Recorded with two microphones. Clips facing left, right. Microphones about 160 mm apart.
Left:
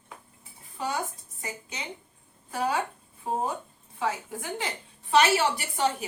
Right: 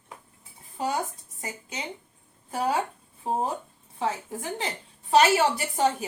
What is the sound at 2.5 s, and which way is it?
A woman's voice, 30° right (ahead or behind).